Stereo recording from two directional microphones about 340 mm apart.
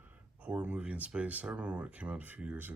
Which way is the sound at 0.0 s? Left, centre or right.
Centre.